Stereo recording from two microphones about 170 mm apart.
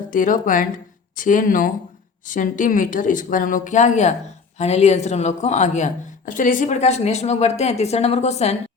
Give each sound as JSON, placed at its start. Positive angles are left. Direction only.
{"t": 0.1, "sound": "a woman's voice", "side_deg": 50}